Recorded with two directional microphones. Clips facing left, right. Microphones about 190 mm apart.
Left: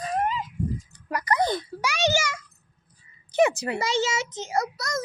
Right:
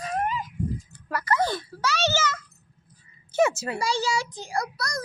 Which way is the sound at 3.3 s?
15° left (ahead or behind).